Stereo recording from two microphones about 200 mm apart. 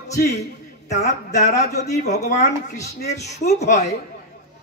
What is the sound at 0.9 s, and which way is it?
Speech, 35° left (ahead or behind).